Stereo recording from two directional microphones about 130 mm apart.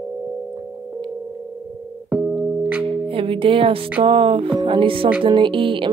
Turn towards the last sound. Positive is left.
turn(degrees=-40)  # may be behind; listen again after turning